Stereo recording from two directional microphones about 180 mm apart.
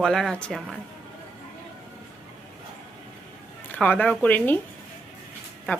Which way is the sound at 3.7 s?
10° left (ahead or behind).